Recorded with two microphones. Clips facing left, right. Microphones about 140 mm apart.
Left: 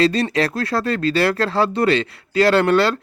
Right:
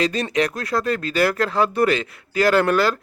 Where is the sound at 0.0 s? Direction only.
30° left (ahead or behind).